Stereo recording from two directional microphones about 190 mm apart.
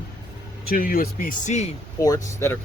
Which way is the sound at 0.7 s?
50° left (ahead or behind).